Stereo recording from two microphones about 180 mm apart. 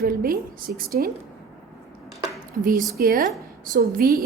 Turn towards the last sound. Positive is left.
turn(degrees=-55)  # may be behind; listen again after turning